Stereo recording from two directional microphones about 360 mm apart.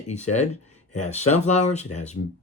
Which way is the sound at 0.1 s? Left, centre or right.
Centre.